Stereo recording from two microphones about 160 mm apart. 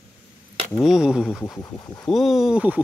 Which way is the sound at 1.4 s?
25° left (ahead or behind).